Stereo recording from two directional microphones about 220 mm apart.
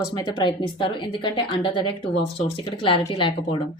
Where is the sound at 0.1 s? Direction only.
20° left (ahead or behind).